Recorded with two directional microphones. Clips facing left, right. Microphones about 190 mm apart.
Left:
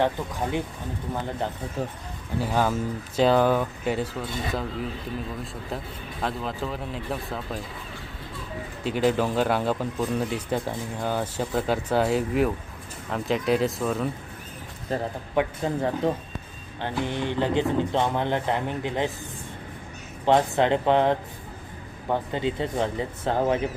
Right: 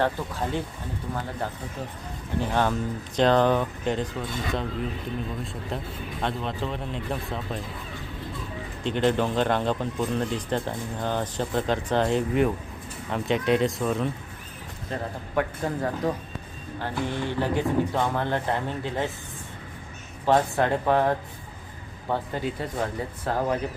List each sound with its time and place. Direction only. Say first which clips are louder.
0.0 s speech: left 1 dB; 15° left (ahead or behind)
2.4 s speech: left 1 dB; 5° left (ahead or behind)
6.2 s speech: even; centre (ahead or behind)
8.8 s speech: even; 5° left (ahead or behind)
14.9 s a man's voice: left 4 dB; 40° left (ahead or behind)
15.4 s speech: left 2 dB; 20° left (ahead or behind)
20.2 s speech: left 1 dB; 20° left (ahead or behind)